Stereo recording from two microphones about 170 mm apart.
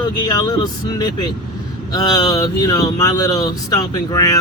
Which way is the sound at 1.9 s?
20° left (ahead or behind).